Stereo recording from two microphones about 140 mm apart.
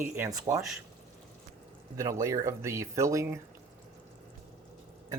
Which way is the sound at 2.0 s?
20° right (ahead or behind).